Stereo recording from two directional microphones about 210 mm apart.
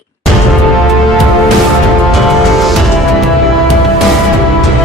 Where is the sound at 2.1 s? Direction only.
Centre (ahead or behind).